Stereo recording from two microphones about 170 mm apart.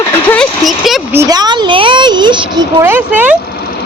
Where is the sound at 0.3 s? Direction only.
5° left (ahead or behind).